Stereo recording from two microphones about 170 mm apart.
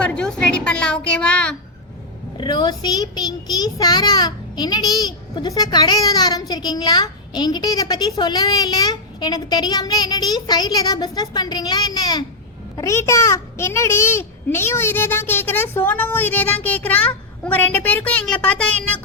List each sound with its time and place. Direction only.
0.0 s a woman's voice: 5° left (ahead or behind)
2.4 s a child's voice: 25° left (ahead or behind); by 18.9 s 5° left (ahead or behind)